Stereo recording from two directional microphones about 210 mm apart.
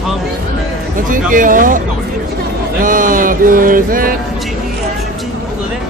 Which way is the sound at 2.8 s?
40° right (ahead or behind).